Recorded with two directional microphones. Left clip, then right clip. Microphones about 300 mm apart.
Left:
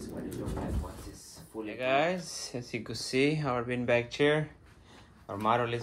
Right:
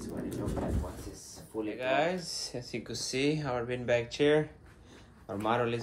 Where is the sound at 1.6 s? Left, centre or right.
Centre.